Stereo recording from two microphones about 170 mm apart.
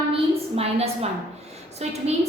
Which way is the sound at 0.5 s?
35° right (ahead or behind).